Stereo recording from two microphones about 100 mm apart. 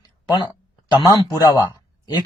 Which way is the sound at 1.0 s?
35° left (ahead or behind).